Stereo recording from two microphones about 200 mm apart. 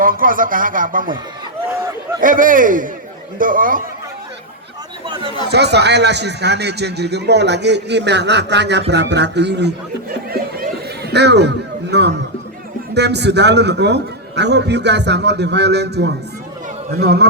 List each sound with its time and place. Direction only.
0.0 s speech: 45° right (ahead or behind)
2.2 s speech: 45° right (ahead or behind)
5.0 s chatter: 25° right (ahead or behind)
5.5 s a man's voice: 55° right (ahead or behind)
10.2 s a sound: 50° right (ahead or behind)
12.9 s a man's voice: 55° right (ahead or behind)